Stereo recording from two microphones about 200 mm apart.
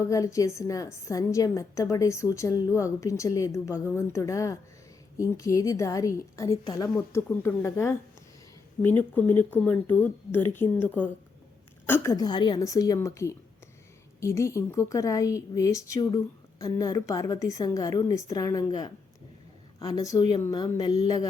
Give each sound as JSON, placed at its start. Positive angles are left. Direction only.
{"t": 0.0, "sound": "a woman's voice", "side_deg": 15}